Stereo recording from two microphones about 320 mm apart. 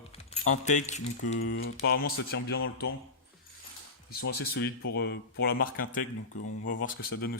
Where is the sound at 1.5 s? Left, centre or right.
Left.